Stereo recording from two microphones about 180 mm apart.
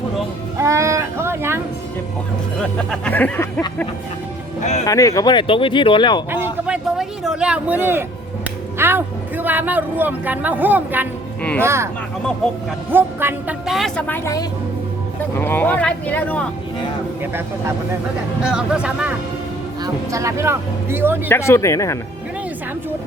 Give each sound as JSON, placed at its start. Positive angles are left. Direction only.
{"t": 0.6, "sound": "a sound", "side_deg": -15}
{"t": 2.6, "sound": "speech", "side_deg": 5}
{"t": 4.9, "sound": "speech", "side_deg": 20}
{"t": 6.3, "sound": "speech", "side_deg": -10}
{"t": 12.9, "sound": "speech", "side_deg": -10}
{"t": 15.4, "sound": "speech", "side_deg": 10}
{"t": 18.4, "sound": "speech", "side_deg": -5}
{"t": 19.8, "sound": "speech", "side_deg": -15}
{"t": 21.2, "sound": "speech", "side_deg": 15}